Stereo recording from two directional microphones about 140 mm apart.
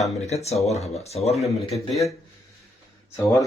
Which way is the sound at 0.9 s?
50° left (ahead or behind).